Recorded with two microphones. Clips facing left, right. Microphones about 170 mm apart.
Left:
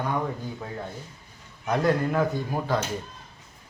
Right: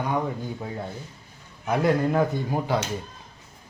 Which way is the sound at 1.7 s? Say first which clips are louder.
Right 2 dB; 10° right (ahead or behind).